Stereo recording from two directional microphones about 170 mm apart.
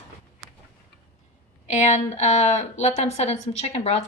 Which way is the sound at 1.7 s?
40° left (ahead or behind).